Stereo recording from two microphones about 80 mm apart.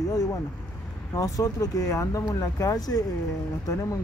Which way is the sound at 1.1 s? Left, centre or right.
Left.